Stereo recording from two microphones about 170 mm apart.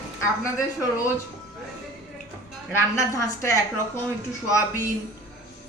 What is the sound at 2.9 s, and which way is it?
Speech, 15° left (ahead or behind).